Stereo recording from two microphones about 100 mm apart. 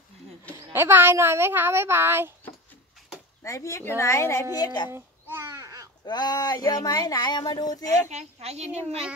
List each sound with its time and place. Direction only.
0.7 s a woman's voice: 20° right (ahead or behind)
3.4 s a woman's voice: 30° left (ahead or behind)
4.6 s speech: 45° left (ahead or behind)
4.9 s babbling: 25° right (ahead or behind)
6.0 s speech: 45° left (ahead or behind)
8.1 s a child's voice: 90° right